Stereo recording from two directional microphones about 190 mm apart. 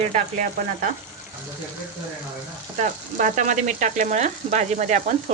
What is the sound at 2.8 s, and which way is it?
Frying, 40° right (ahead or behind).